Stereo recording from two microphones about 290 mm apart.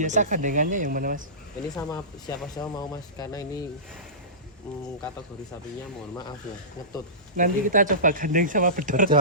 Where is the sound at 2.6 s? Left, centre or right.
Centre.